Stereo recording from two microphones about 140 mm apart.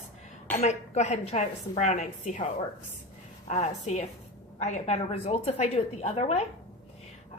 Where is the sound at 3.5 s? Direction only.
55° left (ahead or behind).